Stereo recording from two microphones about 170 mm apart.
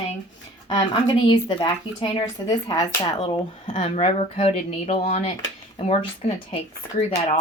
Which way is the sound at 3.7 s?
40° left (ahead or behind).